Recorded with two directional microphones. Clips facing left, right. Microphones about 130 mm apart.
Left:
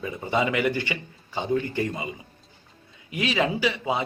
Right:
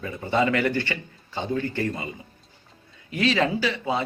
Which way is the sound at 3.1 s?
15° left (ahead or behind).